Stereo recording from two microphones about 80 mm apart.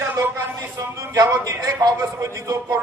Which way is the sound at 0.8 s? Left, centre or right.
Right.